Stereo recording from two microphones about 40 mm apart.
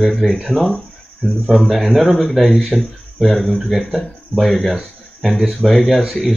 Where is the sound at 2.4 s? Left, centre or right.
Centre.